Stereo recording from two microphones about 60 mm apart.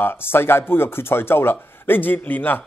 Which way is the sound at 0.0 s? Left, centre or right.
Left.